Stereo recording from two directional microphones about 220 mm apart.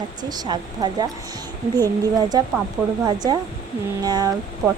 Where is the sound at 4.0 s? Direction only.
20° right (ahead or behind).